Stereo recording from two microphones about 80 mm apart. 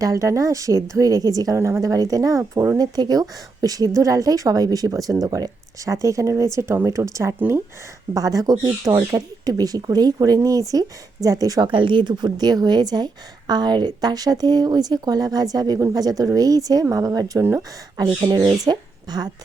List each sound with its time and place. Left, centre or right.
0.0 s speech: right
2.4 s speech: right
2.7 s speech: right
7.3 s speech: right
8.1 s speech: right
11.6 s speech: right